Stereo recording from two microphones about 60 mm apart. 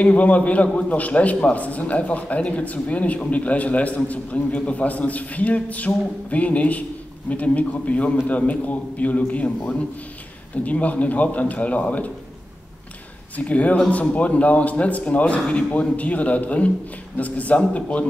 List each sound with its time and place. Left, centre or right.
0.0 s a man's voice: left
10.6 s a man's voice: left
13.4 s a man's voice: left